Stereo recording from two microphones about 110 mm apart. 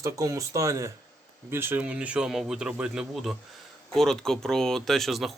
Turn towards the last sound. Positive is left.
turn(degrees=0)  # may be behind; listen again after turning